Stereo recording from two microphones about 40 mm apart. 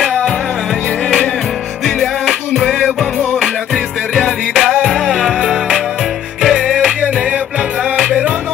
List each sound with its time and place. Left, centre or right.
2.0 s music: centre
4.8 s music: centre